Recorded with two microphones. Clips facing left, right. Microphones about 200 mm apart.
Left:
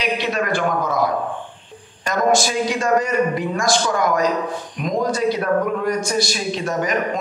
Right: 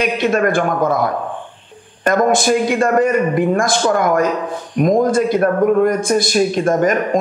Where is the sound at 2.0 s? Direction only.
55° right (ahead or behind).